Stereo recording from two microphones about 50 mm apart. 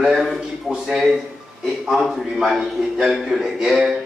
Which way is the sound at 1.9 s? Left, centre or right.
Centre.